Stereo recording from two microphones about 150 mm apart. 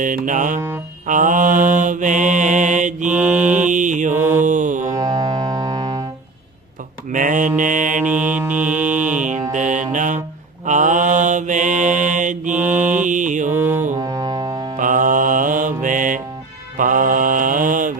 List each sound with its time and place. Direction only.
0.0 s mantra: 60° right (ahead or behind)
3.2 s mantra: 10° right (ahead or behind)
3.4 s mantra: 55° right (ahead or behind)
4.1 s mantra: 15° right (ahead or behind)
4.4 s music: 55° right (ahead or behind)
4.9 s music: 20° right (ahead or behind)
7.1 s mantra: 60° right (ahead or behind)
8.0 s music: 10° right (ahead or behind)
9.5 s mantra: 55° right (ahead or behind)
13.5 s brass instrument: 15° right (ahead or behind)
13.9 s music: 25° right (ahead or behind)
14.8 s music: 60° right (ahead or behind)
16.7 s mantra: 65° right (ahead or behind)